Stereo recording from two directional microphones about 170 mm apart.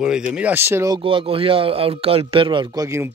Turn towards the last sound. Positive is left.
turn(degrees=-15)  # may be behind; listen again after turning